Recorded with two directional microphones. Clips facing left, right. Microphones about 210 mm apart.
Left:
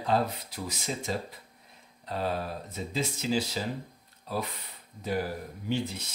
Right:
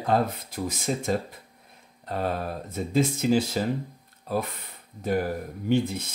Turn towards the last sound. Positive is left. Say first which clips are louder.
# right 7 dB
turn(degrees=-50)  # may be behind; listen again after turning